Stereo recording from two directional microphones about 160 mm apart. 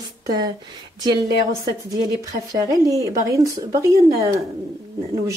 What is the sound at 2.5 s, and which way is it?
Speech, 20° right (ahead or behind).